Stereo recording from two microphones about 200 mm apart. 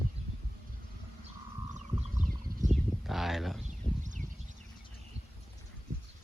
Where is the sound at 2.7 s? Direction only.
Centre (ahead or behind).